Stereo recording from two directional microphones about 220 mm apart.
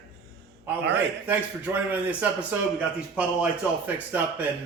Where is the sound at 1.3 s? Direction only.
10° right (ahead or behind).